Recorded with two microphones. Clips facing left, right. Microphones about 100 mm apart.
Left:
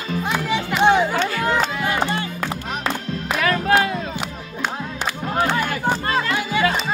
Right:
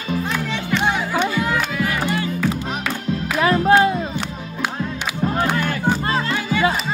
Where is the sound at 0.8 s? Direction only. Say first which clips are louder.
Left 5 dB; 25° left (ahead or behind).